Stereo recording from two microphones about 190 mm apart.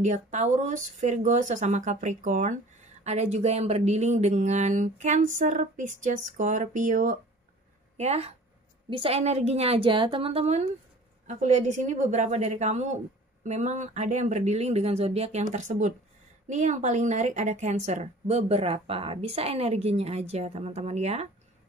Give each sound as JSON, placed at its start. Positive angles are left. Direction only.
{"t": 0.0, "sound": "speech", "side_deg": -40}